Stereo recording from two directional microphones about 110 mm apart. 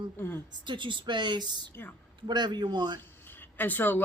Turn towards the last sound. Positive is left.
turn(degrees=15)  # may be behind; listen again after turning